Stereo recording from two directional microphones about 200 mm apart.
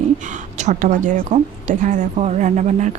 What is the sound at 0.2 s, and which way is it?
A woman's voice, 40° right (ahead or behind).